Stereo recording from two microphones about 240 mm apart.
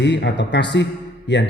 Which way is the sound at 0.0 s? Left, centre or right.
Left.